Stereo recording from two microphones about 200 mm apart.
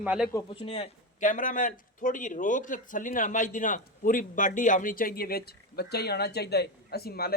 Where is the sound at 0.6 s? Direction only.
30° left (ahead or behind).